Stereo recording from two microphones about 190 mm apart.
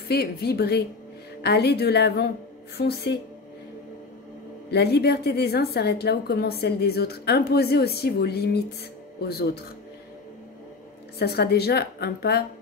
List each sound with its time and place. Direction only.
0.1 s a woman's voice: 55° left (ahead or behind)
4.6 s a woman's voice: 60° left (ahead or behind)
11.1 s a woman's voice: 55° left (ahead or behind)